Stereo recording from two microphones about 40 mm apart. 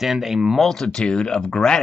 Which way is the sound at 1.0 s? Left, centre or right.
Left.